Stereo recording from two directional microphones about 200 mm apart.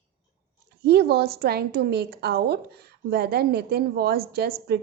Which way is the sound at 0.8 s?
50° right (ahead or behind).